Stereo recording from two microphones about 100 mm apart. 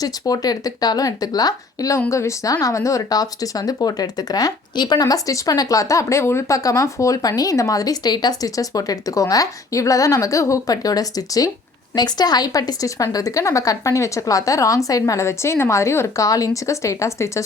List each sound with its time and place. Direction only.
0.0 s speech: 40° left (ahead or behind)